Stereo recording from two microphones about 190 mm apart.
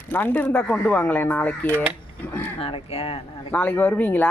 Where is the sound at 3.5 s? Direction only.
10° left (ahead or behind).